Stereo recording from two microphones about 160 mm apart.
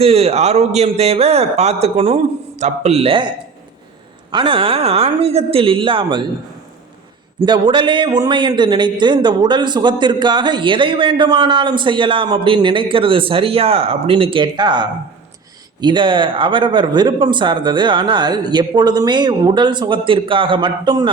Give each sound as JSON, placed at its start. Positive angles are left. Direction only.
{"t": 0.0, "sound": "a man's voice", "side_deg": -40}
{"t": 4.3, "sound": "a man's voice", "side_deg": -30}
{"t": 7.4, "sound": "a man's voice", "side_deg": -30}